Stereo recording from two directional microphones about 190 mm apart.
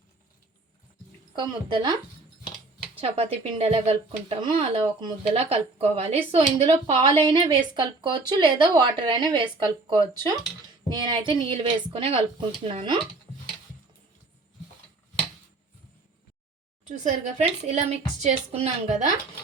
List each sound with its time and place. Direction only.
1.4 s speech: 25° right (ahead or behind)
3.0 s speech: 30° right (ahead or behind)
17.0 s a woman's voice: 35° right (ahead or behind)